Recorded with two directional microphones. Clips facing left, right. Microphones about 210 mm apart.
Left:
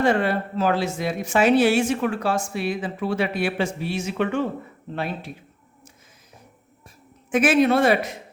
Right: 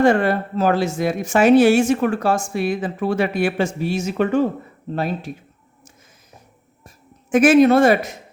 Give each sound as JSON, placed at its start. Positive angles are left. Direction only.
{"t": 0.0, "sound": "speech", "side_deg": -45}
{"t": 6.8, "sound": "speech", "side_deg": -45}